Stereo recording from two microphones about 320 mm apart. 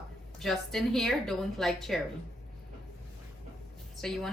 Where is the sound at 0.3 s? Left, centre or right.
Centre.